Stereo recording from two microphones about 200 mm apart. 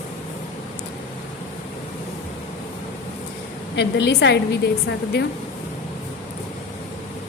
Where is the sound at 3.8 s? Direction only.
60° left (ahead or behind).